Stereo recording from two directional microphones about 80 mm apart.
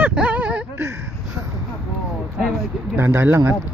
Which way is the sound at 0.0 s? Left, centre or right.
Centre.